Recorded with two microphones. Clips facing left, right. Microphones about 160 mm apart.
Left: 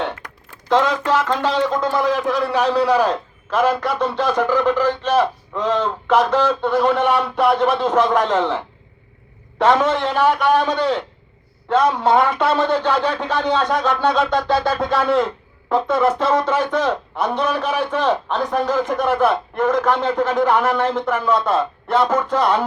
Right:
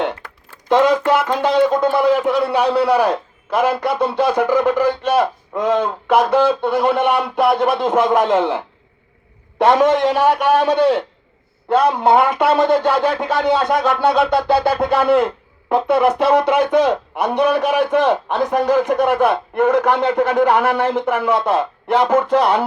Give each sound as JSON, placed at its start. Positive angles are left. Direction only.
{"t": 0.7, "sound": "a man's voice", "side_deg": -10}